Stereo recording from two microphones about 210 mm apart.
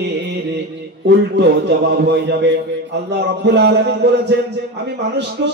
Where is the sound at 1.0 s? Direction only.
55° right (ahead or behind).